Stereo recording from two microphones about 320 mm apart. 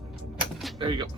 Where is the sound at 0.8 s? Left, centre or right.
Centre.